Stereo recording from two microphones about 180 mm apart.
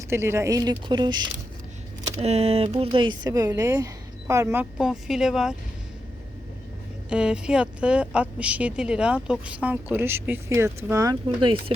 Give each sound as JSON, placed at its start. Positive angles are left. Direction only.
{"t": 0.1, "sound": "speech", "side_deg": -15}
{"t": 2.2, "sound": "speech", "side_deg": -35}
{"t": 4.8, "sound": "speech", "side_deg": 0}
{"t": 7.1, "sound": "a woman's voice", "side_deg": -5}